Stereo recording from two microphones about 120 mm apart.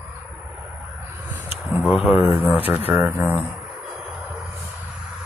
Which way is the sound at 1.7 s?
10° right (ahead or behind).